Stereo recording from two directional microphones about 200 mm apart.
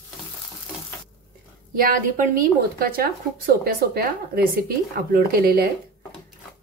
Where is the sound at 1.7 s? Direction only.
45° right (ahead or behind).